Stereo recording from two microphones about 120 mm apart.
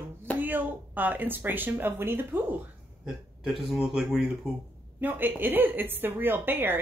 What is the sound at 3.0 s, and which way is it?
Speech, 5° right (ahead or behind).